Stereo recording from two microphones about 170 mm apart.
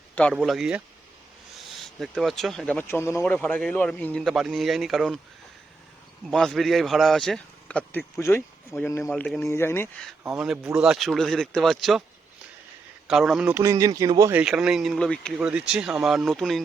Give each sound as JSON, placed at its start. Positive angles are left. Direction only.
{"t": 0.3, "sound": "speech", "side_deg": 0}
{"t": 6.3, "sound": "speech", "side_deg": 0}
{"t": 10.3, "sound": "speech", "side_deg": -5}
{"t": 13.1, "sound": "speech", "side_deg": 0}
{"t": 13.5, "sound": "speech", "side_deg": -15}
{"t": 14.4, "sound": "speech", "side_deg": -5}